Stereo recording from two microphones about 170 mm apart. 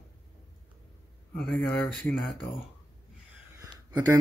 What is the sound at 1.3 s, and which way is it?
Speech, 10° left (ahead or behind).